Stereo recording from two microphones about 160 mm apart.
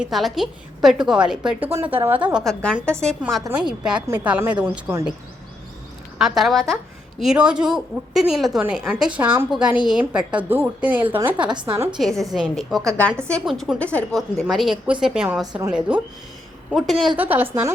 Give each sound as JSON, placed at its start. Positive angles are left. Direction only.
{"t": 0.0, "sound": "a woman's voice", "side_deg": 0}
{"t": 6.1, "sound": "a woman's voice", "side_deg": 0}
{"t": 11.5, "sound": "a woman's voice", "side_deg": -30}
{"t": 11.9, "sound": "a woman's voice", "side_deg": 0}
{"t": 17.2, "sound": "a woman's voice", "side_deg": -10}